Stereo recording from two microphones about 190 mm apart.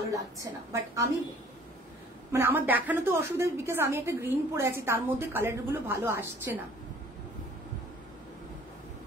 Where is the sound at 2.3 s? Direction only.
10° right (ahead or behind).